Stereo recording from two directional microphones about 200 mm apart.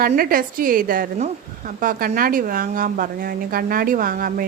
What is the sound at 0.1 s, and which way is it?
A woman's voice, 45° right (ahead or behind).